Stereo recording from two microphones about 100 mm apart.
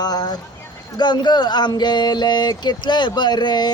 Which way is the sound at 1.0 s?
45° left (ahead or behind).